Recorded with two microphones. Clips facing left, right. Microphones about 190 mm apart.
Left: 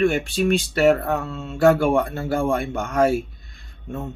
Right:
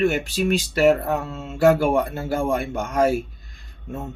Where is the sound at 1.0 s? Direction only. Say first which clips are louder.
Even; 10° right (ahead or behind).